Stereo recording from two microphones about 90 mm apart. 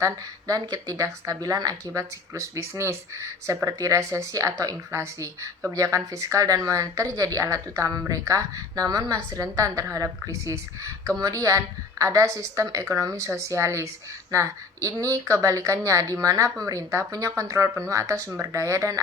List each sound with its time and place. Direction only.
0.0 s speech: 40° right (ahead or behind)